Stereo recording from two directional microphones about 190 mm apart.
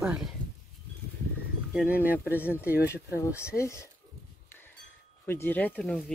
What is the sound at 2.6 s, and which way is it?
Speech, 55° left (ahead or behind).